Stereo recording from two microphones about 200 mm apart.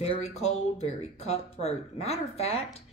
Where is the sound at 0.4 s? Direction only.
30° left (ahead or behind).